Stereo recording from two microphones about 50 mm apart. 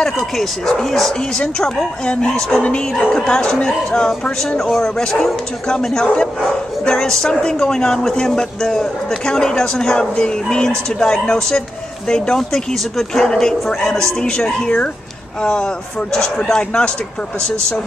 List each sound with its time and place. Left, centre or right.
0.4 s speech: centre
2.6 s speech: left